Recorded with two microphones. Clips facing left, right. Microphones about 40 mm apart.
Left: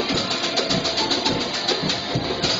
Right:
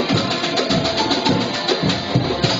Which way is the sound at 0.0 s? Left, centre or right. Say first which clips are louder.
Right 4 dB; centre.